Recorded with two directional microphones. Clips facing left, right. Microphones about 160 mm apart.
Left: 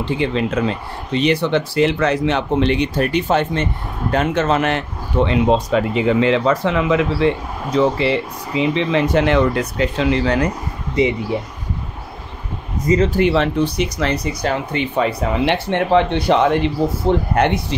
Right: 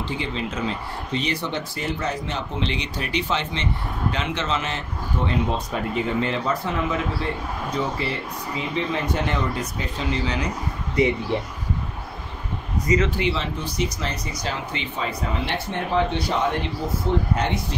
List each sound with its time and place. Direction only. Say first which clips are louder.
0.2 s speech: left 9 dB; 65° left (ahead or behind)
11.3 s speech: left 3 dB; 5° left (ahead or behind)
12.8 s a man's voice: left 6 dB; 30° left (ahead or behind)
13.2 s speech: left 10 dB; 60° left (ahead or behind)